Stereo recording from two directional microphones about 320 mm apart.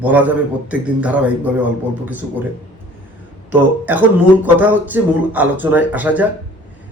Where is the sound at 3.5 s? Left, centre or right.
Centre.